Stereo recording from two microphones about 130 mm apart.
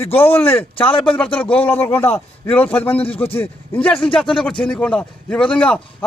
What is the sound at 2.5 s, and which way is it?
A man's voice, 10° left (ahead or behind).